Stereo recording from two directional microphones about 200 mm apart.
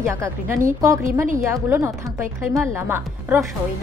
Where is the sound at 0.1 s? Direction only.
15° right (ahead or behind).